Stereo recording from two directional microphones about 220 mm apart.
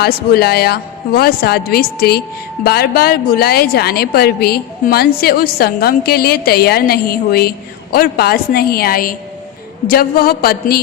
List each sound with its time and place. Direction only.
0.0 s a woman's voice: 45° left (ahead or behind)